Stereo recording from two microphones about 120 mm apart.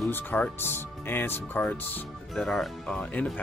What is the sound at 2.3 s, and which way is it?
Speech, 5° left (ahead or behind).